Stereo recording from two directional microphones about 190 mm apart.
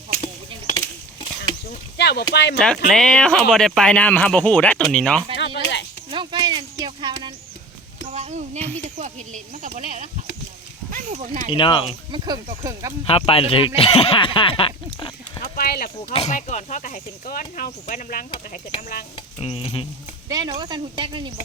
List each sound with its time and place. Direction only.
2.0 s a sound: 60° left (ahead or behind)
2.3 s speech: 60° left (ahead or behind)
2.6 s speech: 5° left (ahead or behind)
6.1 s a sound: 25° right (ahead or behind)
8.1 s a sound: 35° right (ahead or behind)
9.0 s speech: 40° right (ahead or behind)
10.9 s speech: 40° right (ahead or behind)
11.4 s speech: 25° left (ahead or behind)
12.1 s speech: 20° right (ahead or behind)
13.1 s speech: 30° left (ahead or behind)
15.5 s speech: 50° left (ahead or behind)
16.1 s speech: 35° left (ahead or behind)
19.1 s speech: 30° left (ahead or behind)
20.2 s speech: 20° right (ahead or behind)